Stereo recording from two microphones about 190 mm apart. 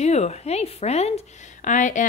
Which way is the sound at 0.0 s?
35° left (ahead or behind).